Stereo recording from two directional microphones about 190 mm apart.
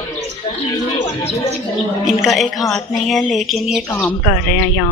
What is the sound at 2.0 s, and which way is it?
A woman's voice, centre (ahead or behind).